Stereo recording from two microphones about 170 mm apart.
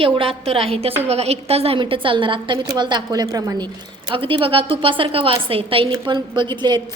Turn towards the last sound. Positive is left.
turn(degrees=-25)  # may be behind; listen again after turning